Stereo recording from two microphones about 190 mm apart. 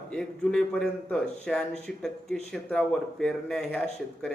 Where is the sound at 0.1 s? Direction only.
5° left (ahead or behind).